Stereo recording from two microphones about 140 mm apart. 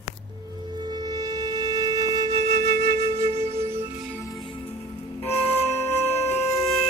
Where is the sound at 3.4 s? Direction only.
50° right (ahead or behind).